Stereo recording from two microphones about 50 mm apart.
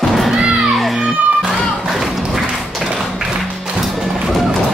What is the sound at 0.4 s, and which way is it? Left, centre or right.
Music, centre.